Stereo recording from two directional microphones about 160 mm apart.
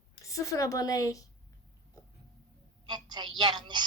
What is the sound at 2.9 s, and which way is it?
Speech, 25° right (ahead or behind).